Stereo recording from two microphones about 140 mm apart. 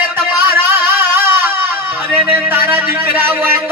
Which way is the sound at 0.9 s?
15° right (ahead or behind).